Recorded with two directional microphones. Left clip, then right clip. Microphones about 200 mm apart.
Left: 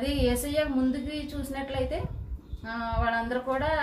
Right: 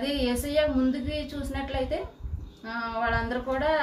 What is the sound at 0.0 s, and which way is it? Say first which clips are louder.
A woman's voice: left 1 dB; centre (ahead or behind).